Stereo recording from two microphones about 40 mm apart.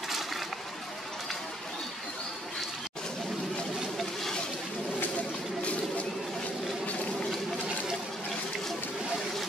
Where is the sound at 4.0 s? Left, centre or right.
Centre.